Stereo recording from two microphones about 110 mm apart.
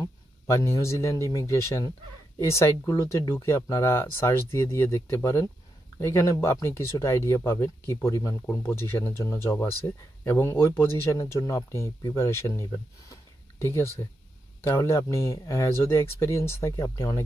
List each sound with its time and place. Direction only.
0.0 s a man's voice: 30° left (ahead or behind)
11.1 s a man's voice: 30° left (ahead or behind)